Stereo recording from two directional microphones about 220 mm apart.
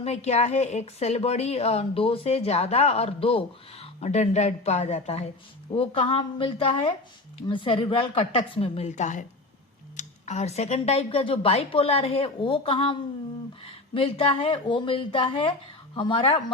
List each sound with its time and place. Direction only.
0.0 s a woman's voice: 30° left (ahead or behind)